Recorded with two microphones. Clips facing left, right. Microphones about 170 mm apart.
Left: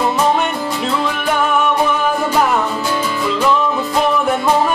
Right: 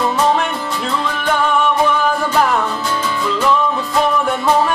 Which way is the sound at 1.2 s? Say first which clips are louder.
Right 1 dB; 5° left (ahead or behind).